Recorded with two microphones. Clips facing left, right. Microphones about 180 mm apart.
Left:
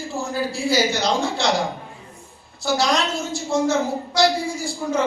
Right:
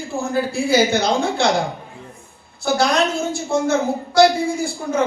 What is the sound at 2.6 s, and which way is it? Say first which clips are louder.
A woman's voice: right 3 dB; 55° right (ahead or behind).